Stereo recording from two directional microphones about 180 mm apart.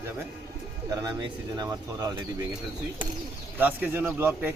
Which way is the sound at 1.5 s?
20° right (ahead or behind).